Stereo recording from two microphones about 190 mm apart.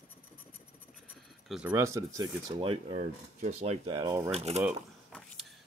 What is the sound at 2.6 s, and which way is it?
Cutlery, 30° right (ahead or behind).